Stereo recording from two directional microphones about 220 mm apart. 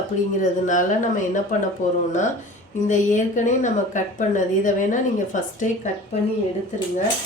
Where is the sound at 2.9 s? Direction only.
35° left (ahead or behind).